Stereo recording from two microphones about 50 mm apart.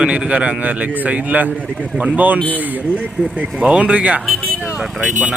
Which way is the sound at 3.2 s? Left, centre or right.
Centre.